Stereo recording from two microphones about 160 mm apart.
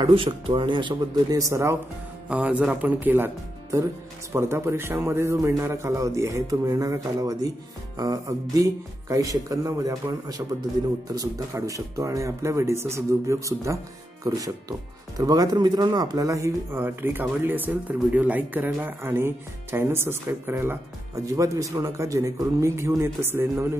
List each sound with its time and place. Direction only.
0.0 s speech: 30° right (ahead or behind); by 23.4 s 15° right (ahead or behind)